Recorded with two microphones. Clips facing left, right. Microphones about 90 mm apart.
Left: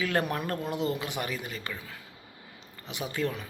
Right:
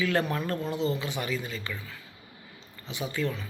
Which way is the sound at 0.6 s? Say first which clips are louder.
Right 1 dB; 10° left (ahead or behind).